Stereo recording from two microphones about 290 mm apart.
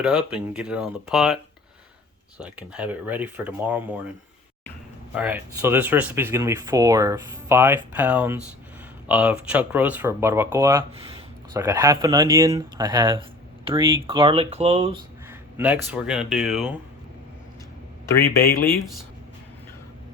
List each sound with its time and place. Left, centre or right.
0.0 s speech: centre
2.4 s speech: centre
5.1 s speech: centre; by 14.9 s right
15.3 s speech: centre